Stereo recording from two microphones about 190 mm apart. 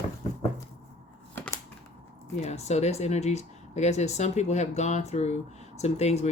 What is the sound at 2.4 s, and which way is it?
Speech, 35° left (ahead or behind).